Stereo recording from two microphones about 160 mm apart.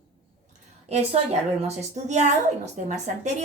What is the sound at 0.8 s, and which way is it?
A woman's voice, 40° right (ahead or behind).